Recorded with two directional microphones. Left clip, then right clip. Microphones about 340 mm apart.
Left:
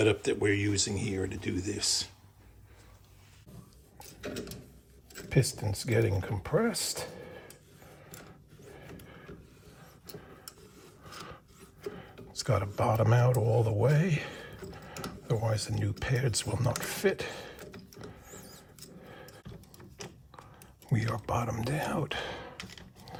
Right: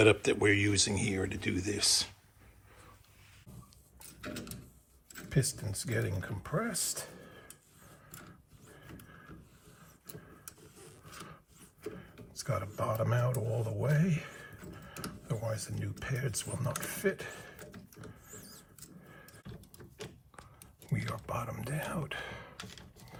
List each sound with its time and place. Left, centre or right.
0.0 s speech: centre
5.3 s speech: centre
11.9 s speech: left
20.9 s speech: left